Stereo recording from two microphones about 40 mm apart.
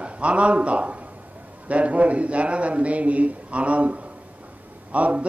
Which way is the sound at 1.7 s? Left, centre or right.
Right.